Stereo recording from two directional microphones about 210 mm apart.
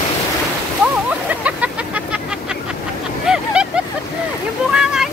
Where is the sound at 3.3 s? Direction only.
5° right (ahead or behind).